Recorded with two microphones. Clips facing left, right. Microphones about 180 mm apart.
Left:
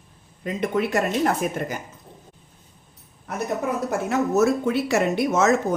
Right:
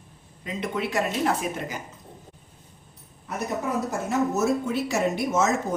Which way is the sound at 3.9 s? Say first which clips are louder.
Left 4 dB; 70° left (ahead or behind).